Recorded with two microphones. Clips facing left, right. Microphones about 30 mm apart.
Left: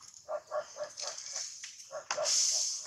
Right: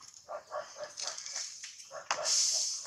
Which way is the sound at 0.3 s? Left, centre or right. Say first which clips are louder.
Left 4 dB; centre.